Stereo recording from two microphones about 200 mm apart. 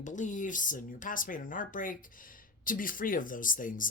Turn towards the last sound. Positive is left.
turn(degrees=40)  # may be behind; listen again after turning